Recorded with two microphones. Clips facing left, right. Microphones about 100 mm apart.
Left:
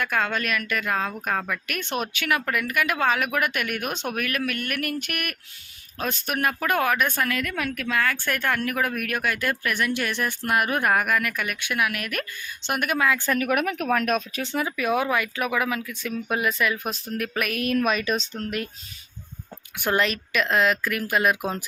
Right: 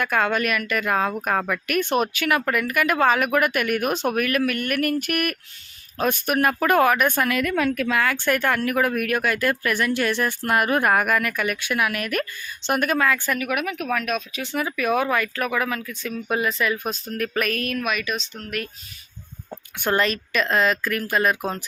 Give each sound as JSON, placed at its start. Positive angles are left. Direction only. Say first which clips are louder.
{"t": 0.0, "sound": "speech", "louder": "right 4 dB", "side_deg": -5}
{"t": 7.2, "sound": "speech", "louder": "right 5 dB", "side_deg": -15}
{"t": 8.4, "sound": "speech", "louder": "right 1 dB", "side_deg": -5}
{"t": 13.1, "sound": "speech", "louder": "right 1 dB", "side_deg": 20}
{"t": 13.3, "sound": "speech", "louder": "left 2 dB", "side_deg": 40}
{"t": 14.5, "sound": "speech", "louder": "right 2 dB", "side_deg": 20}
{"t": 17.7, "sound": "speech", "louder": "left 3 dB", "side_deg": 35}
{"t": 19.8, "sound": "speech", "louder": "right 2 dB", "side_deg": 5}